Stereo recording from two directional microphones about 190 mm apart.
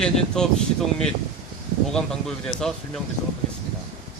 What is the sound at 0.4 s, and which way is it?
Speech, 5° left (ahead or behind).